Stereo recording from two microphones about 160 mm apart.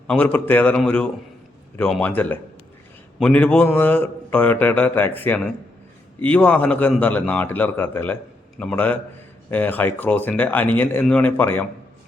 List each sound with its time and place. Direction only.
0.1 s a man's voice: 10° left (ahead or behind)